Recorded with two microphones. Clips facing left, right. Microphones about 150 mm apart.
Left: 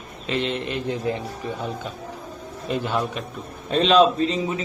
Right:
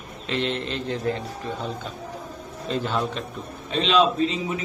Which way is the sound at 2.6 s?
15° left (ahead or behind).